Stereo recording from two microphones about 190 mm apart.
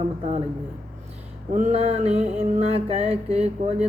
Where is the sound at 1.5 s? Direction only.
35° right (ahead or behind).